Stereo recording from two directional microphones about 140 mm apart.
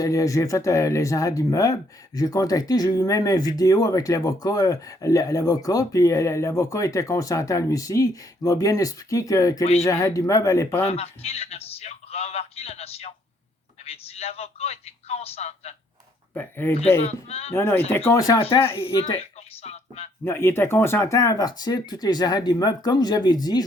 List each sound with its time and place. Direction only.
0.0 s speech: 25° left (ahead or behind)
10.8 s a man's voice: 50° left (ahead or behind)
16.3 s speech: 15° left (ahead or behind)
17.0 s speech: 50° left (ahead or behind)
17.5 s speech: 15° left (ahead or behind)
18.9 s a sound: 45° left (ahead or behind)
20.2 s speech: 15° left (ahead or behind)